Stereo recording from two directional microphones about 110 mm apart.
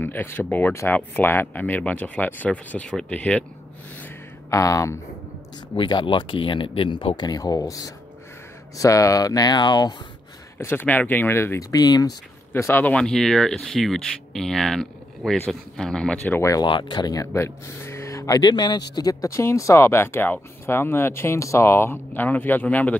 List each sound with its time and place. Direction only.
0.0 s speech: 20° left (ahead or behind)
4.5 s speech: 30° left (ahead or behind)
5.8 s speech: 45° left (ahead or behind)
10.6 s speech: 20° left (ahead or behind)
11.7 s speech: 35° left (ahead or behind)
12.5 s speech: 20° left (ahead or behind)
13.0 s speech: 5° left (ahead or behind)
16.6 s speech: 45° left (ahead or behind); by 18.4 s 30° left (ahead or behind)
18.4 s speech: 40° left (ahead or behind); by 22.9 s 15° left (ahead or behind)